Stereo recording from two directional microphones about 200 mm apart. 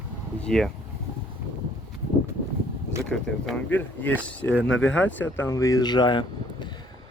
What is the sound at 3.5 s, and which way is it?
Speech, 5° left (ahead or behind).